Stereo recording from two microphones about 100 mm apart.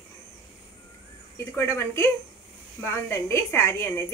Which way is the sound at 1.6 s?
25° left (ahead or behind).